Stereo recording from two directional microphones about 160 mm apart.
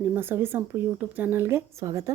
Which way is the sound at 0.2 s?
15° right (ahead or behind).